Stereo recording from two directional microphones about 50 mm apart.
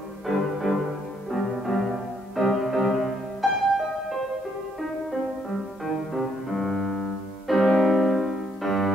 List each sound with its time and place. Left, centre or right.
0.3 s music: centre
5.9 s music: centre